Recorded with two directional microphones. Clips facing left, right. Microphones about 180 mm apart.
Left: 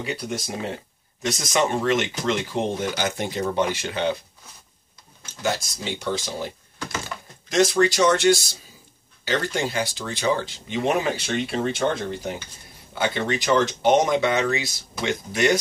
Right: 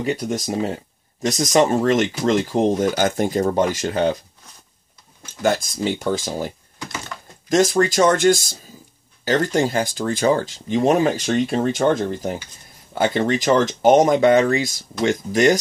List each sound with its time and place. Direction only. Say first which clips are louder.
0.0 s speech: right 6 dB; 40° right (ahead or behind)
5.4 s speech: right 7 dB; 50° right (ahead or behind)
7.1 s typing: even; 10° left (ahead or behind)
7.4 s speech: right 2 dB; 45° right (ahead or behind)